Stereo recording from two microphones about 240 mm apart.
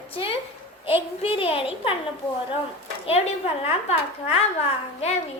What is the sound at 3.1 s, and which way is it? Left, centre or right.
A woman's voice, left.